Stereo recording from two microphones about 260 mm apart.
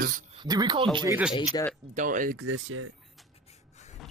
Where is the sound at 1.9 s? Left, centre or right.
Right.